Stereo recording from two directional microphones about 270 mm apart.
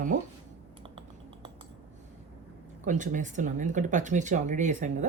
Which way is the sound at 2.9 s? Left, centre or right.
Right.